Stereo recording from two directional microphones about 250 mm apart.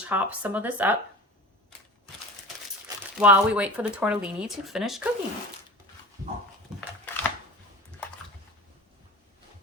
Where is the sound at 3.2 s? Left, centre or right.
Centre.